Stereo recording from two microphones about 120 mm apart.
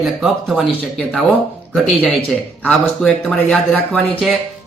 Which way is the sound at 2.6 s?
5° left (ahead or behind).